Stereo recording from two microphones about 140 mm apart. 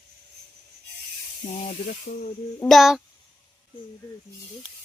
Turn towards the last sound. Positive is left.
turn(degrees=0)  # may be behind; listen again after turning